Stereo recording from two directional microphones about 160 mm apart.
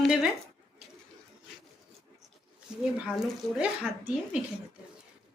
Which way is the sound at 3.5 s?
5° right (ahead or behind).